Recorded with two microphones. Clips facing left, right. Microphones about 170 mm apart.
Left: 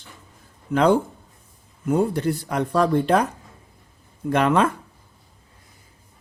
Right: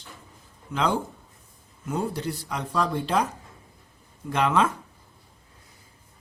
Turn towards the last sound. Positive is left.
turn(degrees=55)  # may be behind; listen again after turning